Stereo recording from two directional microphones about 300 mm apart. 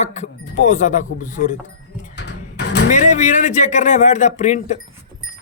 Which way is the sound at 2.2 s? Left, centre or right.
Left.